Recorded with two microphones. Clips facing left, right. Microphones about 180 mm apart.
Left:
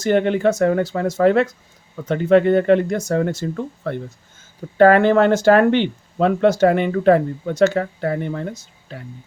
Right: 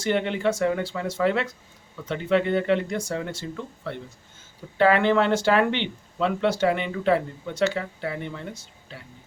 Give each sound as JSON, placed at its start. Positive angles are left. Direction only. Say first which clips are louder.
{"t": 0.0, "sound": "speech", "louder": "left 7 dB", "side_deg": 45}